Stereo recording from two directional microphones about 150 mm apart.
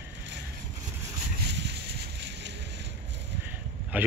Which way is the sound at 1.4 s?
90° right.